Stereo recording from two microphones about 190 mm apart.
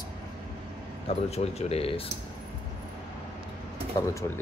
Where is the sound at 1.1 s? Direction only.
35° left (ahead or behind).